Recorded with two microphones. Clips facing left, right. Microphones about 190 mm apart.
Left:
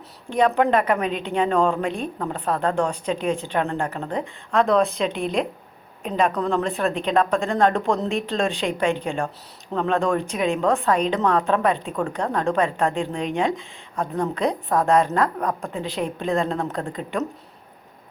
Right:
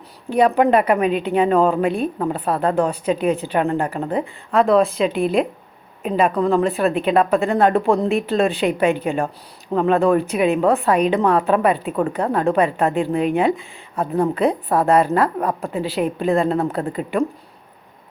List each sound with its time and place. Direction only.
0.3 s a woman's voice: 10° right (ahead or behind)